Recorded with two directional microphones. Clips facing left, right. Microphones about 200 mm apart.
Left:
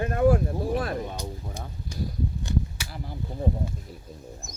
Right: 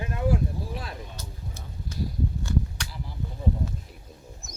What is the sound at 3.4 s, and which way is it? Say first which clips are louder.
Speech: left 1 dB; 50° left (ahead or behind).